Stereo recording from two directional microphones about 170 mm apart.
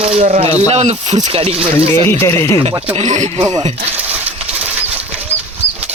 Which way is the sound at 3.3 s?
25° right (ahead or behind).